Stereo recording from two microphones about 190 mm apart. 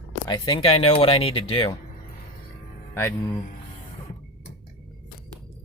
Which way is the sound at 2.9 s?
15° left (ahead or behind).